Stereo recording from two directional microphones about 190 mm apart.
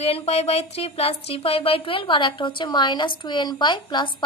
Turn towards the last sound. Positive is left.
turn(degrees=25)  # may be behind; listen again after turning